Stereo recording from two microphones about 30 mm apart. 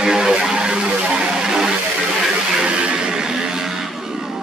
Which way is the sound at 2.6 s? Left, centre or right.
Right.